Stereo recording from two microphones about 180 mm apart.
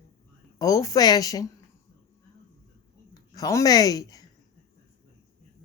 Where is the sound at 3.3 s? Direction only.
20° left (ahead or behind).